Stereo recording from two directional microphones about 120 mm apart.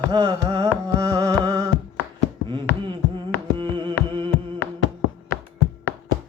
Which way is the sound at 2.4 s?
40° right (ahead or behind).